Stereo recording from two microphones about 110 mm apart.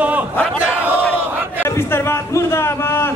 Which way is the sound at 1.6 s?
20° left (ahead or behind).